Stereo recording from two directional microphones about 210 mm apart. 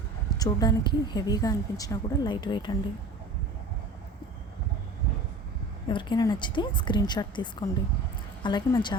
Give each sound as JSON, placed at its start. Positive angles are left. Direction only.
{"t": 0.3, "sound": "a woman's voice", "side_deg": 15}
{"t": 5.9, "sound": "a woman's voice", "side_deg": 20}